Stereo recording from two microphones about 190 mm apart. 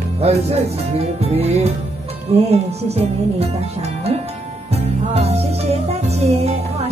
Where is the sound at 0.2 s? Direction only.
35° right (ahead or behind).